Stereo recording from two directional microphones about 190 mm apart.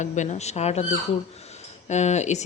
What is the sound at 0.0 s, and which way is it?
Speech, 40° left (ahead or behind).